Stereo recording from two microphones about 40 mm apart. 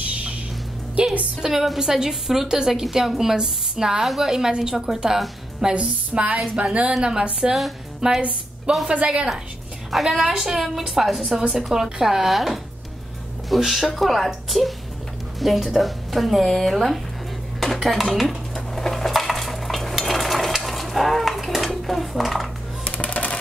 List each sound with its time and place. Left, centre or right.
0.0 s music: right
1.4 s speech: centre
4.0 s speech: centre
5.6 s speech: right
6.9 s speech: centre
8.2 s a woman's voice: right
10.2 s speech: centre
18.5 s dishes: centre
22.8 s coin: left
23.1 s a sound: left